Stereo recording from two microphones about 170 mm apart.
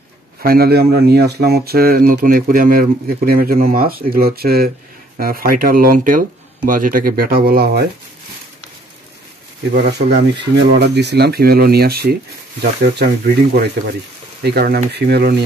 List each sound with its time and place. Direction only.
0.4 s speech: 60° right (ahead or behind)
9.8 s speech: 75° right (ahead or behind)